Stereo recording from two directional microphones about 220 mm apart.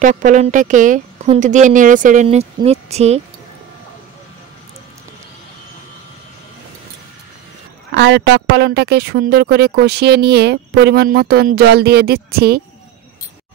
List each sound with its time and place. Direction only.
0.0 s speech: 35° right (ahead or behind)
7.9 s a woman's voice: 50° right (ahead or behind)